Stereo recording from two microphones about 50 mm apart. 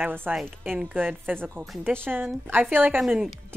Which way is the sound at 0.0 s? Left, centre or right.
Right.